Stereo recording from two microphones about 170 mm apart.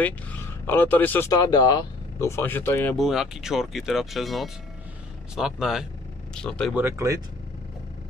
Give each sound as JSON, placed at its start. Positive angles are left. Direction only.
{"t": 0.0, "sound": "speech", "side_deg": 10}
{"t": 1.3, "sound": "speech", "side_deg": 25}
{"t": 3.0, "sound": "speech", "side_deg": 0}
{"t": 6.7, "sound": "speech", "side_deg": -15}